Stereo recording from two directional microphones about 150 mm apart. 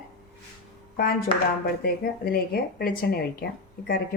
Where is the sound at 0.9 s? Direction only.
80° left.